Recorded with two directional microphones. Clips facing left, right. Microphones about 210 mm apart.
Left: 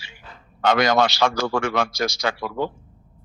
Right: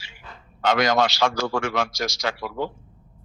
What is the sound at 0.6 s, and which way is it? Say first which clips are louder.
A man's voice: left 2 dB; 55° left (ahead or behind).